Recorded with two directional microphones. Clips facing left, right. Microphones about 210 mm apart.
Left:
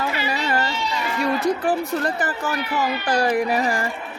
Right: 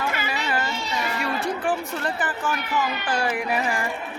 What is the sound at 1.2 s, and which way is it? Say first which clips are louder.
Speech: left 8 dB; 40° left (ahead or behind).